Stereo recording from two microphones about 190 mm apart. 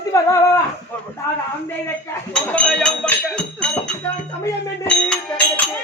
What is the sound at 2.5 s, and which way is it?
Music, 5° left (ahead or behind).